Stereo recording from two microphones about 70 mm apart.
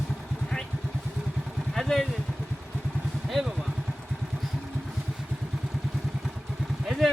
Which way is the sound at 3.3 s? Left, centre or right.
Centre.